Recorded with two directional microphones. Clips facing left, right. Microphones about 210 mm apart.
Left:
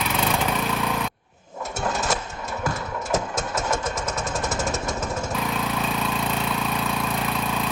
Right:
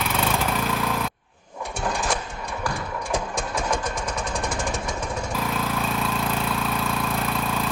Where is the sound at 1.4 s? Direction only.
20° left (ahead or behind).